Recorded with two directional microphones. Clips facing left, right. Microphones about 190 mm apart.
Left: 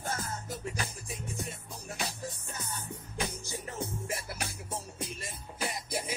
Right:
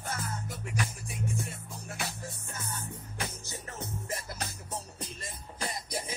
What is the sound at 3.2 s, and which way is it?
Music, 15° left (ahead or behind).